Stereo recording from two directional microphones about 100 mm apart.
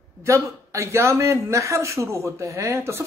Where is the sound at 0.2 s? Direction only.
30° right (ahead or behind).